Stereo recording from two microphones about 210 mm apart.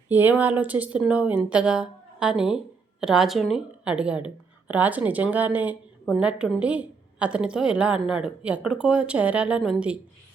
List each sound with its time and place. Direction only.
0.1 s a woman's voice: 10° right (ahead or behind)